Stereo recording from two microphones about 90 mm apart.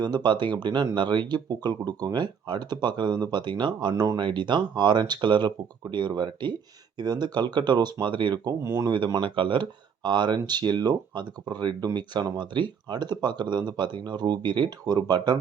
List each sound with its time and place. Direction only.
0.0 s speech: 50° right (ahead or behind)
4.2 s speech: 65° right (ahead or behind)
8.6 s speech: 35° right (ahead or behind)
9.2 s speech: 65° right (ahead or behind)